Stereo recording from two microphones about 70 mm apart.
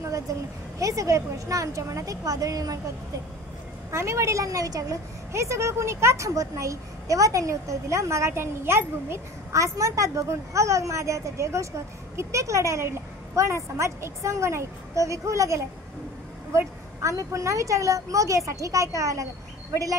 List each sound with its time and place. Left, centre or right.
0.3 s a woman's voice: right
3.9 s a woman's voice: right